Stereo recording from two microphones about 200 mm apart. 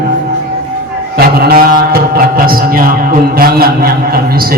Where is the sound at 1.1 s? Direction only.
50° right (ahead or behind).